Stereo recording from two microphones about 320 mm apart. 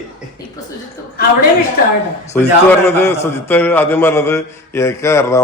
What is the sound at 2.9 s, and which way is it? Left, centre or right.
A man's voice, centre.